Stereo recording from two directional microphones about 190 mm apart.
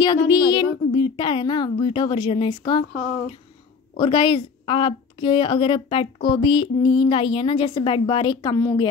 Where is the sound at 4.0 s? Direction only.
25° left (ahead or behind).